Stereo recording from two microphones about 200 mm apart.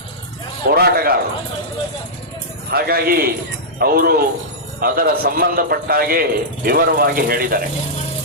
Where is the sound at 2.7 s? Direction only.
50° right (ahead or behind).